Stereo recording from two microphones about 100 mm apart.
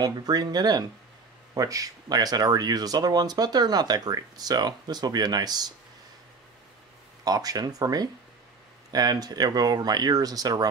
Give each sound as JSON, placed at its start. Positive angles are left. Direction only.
{"t": 0.0, "sound": "speech", "side_deg": -40}
{"t": 7.2, "sound": "speech", "side_deg": -40}